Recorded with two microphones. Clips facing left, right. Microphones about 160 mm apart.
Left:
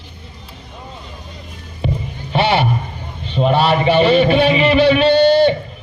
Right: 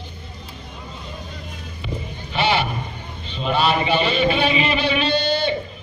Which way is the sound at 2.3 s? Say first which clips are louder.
Left 5 dB; 60° left (ahead or behind).